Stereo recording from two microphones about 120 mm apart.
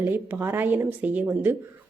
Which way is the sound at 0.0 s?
15° right (ahead or behind).